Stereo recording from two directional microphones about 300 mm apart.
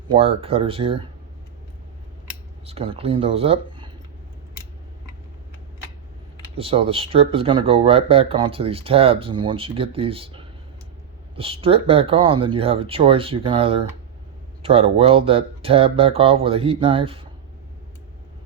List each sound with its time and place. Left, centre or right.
0.1 s speech: centre
2.6 s speech: centre
6.6 s speech: centre